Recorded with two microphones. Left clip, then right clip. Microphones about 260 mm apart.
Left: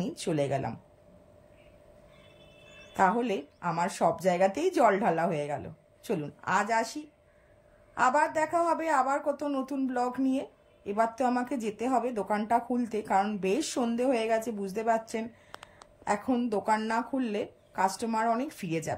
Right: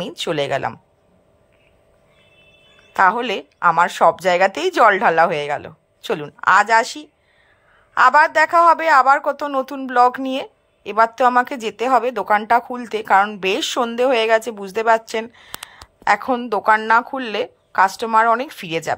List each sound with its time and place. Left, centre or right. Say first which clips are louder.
0.0 s a woman's voice: right 9 dB; right
3.0 s a woman's voice: right 10 dB; right
7.9 s a woman's voice: right 13 dB; right
16.6 s a woman's voice: right 18 dB; right